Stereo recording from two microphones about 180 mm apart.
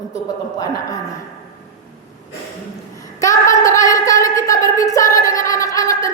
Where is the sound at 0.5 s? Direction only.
20° left (ahead or behind).